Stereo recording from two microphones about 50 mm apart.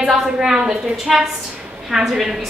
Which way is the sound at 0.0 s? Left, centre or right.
Centre.